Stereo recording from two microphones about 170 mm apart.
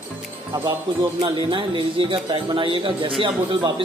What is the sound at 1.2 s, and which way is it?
Speech, 30° right (ahead or behind).